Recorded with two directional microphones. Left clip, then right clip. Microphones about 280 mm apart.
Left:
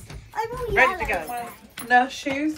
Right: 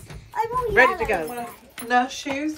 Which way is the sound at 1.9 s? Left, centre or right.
Centre.